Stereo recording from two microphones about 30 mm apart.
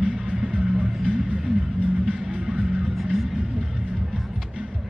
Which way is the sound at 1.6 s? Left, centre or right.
Right.